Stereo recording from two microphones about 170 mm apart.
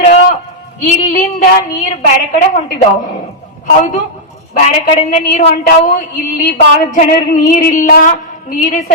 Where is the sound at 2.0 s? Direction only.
50° left (ahead or behind).